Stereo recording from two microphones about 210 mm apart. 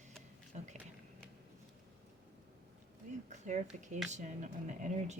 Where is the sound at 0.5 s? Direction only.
35° right (ahead or behind).